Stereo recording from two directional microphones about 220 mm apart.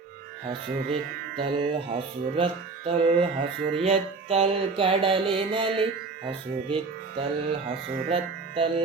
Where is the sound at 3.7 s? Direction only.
25° right (ahead or behind).